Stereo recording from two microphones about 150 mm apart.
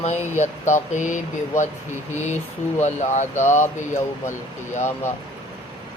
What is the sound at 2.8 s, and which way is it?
Speech, 50° left (ahead or behind).